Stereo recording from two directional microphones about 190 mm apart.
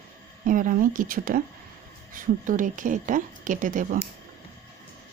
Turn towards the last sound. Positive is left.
turn(degrees=-45)  # may be behind; listen again after turning